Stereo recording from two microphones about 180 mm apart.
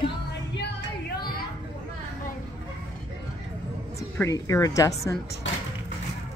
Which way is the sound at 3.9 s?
15° left (ahead or behind).